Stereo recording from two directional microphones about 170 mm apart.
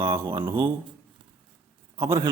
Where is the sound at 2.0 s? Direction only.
15° right (ahead or behind).